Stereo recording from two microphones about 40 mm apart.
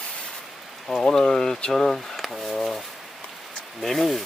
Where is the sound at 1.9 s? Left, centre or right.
Centre.